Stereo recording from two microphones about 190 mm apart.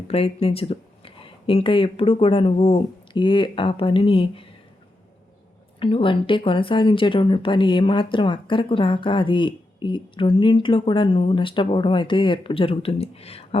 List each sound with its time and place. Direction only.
0.1 s speech: 30° left (ahead or behind)
5.8 s speech: 25° left (ahead or behind)